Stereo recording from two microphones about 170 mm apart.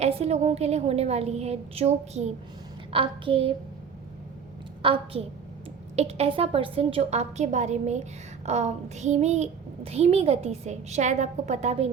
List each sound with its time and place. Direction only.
0.0 s a child's voice: 35° right (ahead or behind)
4.8 s a child's voice: 30° right (ahead or behind)